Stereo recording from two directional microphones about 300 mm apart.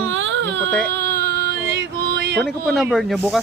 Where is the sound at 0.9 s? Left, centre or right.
Right.